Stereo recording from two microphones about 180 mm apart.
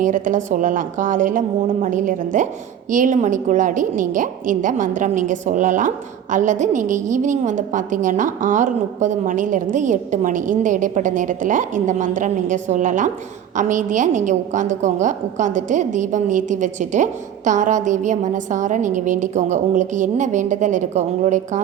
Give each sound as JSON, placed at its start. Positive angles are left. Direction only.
{"t": 0.0, "sound": "a woman's voice", "side_deg": -45}